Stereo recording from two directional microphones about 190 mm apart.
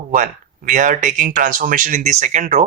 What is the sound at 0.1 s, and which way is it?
Speech, 45° right (ahead or behind).